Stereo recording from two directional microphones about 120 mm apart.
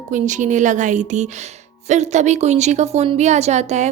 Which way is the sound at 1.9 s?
75° right (ahead or behind).